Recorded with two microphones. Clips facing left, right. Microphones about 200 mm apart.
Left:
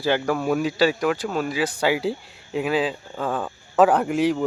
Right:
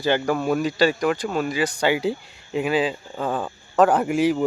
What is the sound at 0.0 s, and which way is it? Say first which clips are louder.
Speech: right 1 dB; centre (ahead or behind).